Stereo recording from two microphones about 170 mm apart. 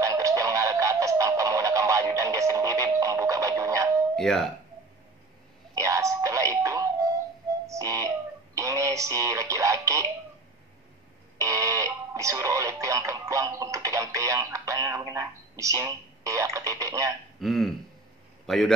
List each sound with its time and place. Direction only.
0.0 s music: 20° right (ahead or behind)
4.2 s speech: centre (ahead or behind)
5.8 s music: 20° right (ahead or behind)
11.3 s music: 20° right (ahead or behind)
17.4 s throat clearing: centre (ahead or behind)
18.5 s a man's voice: 5° left (ahead or behind)